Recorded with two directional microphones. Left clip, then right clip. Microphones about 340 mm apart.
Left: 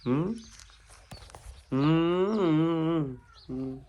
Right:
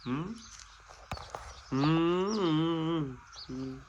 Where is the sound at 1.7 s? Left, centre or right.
Centre.